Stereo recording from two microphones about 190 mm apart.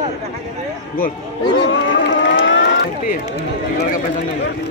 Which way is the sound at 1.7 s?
70° left (ahead or behind).